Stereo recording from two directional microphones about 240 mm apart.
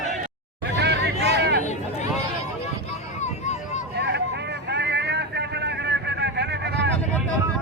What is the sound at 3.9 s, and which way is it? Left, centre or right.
Vehicle, right.